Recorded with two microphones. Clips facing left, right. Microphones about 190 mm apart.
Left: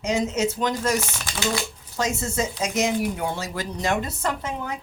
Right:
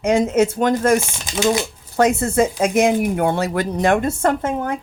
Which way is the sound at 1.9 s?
60° right (ahead or behind).